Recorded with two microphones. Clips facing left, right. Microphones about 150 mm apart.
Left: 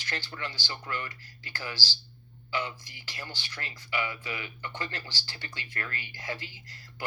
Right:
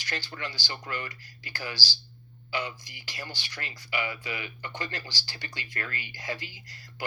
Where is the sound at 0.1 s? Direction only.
15° right (ahead or behind).